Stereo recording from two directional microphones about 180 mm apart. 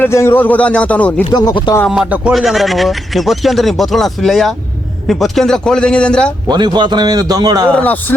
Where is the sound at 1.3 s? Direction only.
20° left (ahead or behind).